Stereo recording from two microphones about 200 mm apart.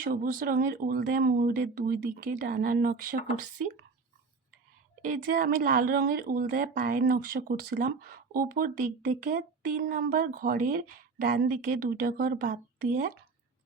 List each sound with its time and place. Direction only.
0.0 s speech: 40° right (ahead or behind)
5.0 s speech: 45° right (ahead or behind)